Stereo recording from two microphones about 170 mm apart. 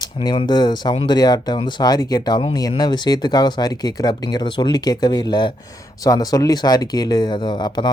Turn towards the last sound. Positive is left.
turn(degrees=25)  # may be behind; listen again after turning